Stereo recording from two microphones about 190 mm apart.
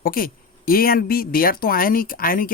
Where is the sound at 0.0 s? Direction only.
50° left (ahead or behind).